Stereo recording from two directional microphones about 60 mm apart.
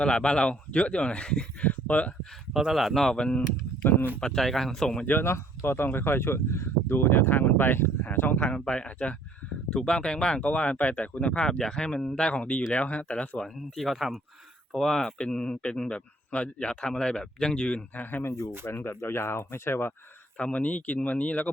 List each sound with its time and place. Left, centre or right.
0.0 s speech: centre
2.5 s speech: centre
2.7 s speech: centre
3.8 s speech: left
4.2 s speech: centre
5.2 s speech: left; by 13.4 s centre
13.4 s speech: centre
17.9 s speech: left
18.6 s speech: left
20.3 s speech: left